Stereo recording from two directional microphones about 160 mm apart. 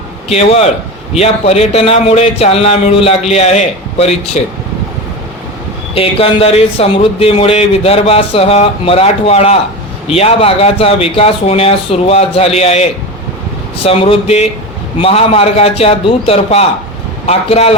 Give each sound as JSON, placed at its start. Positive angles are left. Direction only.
{"t": 0.3, "sound": "speech", "side_deg": 40}
{"t": 5.9, "sound": "speech", "side_deg": 35}
{"t": 13.8, "sound": "speech", "side_deg": 35}